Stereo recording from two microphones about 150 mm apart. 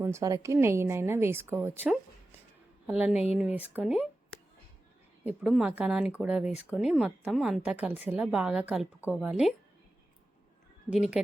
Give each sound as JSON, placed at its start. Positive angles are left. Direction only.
{"t": 0.0, "sound": "a woman's voice", "side_deg": -20}
{"t": 5.2, "sound": "a woman's voice", "side_deg": -5}
{"t": 10.8, "sound": "a woman's voice", "side_deg": -5}